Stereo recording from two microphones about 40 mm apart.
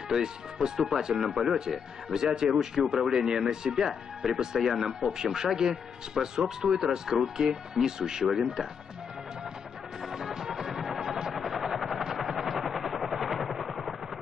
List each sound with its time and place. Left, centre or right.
0.1 s speech: centre
2.1 s speech: centre
10.0 s music: centre
11.3 s helicopter: centre